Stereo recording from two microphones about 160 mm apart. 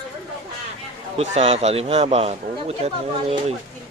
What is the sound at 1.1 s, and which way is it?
A man's voice, 40° right (ahead or behind).